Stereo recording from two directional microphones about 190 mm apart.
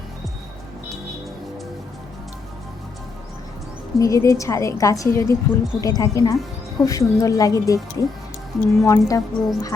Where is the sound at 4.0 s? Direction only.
15° left (ahead or behind).